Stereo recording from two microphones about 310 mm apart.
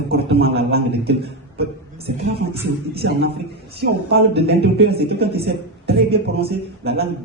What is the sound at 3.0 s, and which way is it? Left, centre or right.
Speech, right.